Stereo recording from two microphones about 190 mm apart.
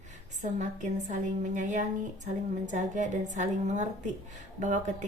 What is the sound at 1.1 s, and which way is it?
A woman's voice, 40° right (ahead or behind).